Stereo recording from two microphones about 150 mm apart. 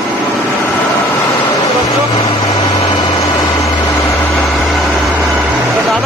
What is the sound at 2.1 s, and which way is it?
Vehicle, 35° left (ahead or behind).